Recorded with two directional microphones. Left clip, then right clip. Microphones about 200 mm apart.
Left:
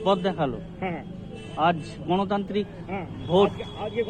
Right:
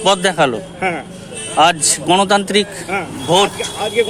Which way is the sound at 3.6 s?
20° right (ahead or behind).